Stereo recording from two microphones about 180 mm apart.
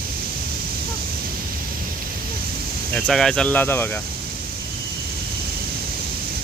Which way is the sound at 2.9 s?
5° left (ahead or behind).